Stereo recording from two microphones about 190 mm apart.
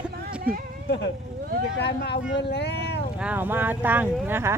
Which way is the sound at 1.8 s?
60° left (ahead or behind).